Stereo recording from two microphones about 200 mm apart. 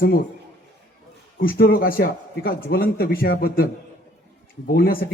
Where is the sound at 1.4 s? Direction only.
50° left (ahead or behind).